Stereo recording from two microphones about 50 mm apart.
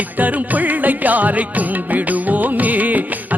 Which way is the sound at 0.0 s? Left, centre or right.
Right.